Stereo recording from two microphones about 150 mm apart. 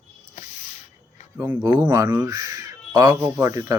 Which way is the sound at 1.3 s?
15° right (ahead or behind).